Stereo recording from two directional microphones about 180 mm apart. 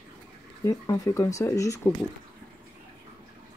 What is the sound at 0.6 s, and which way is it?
Speech, 20° left (ahead or behind).